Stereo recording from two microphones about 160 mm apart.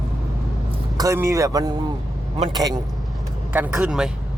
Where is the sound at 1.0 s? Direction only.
20° right (ahead or behind).